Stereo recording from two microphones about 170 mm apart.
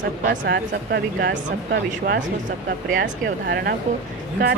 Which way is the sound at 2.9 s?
75° right (ahead or behind).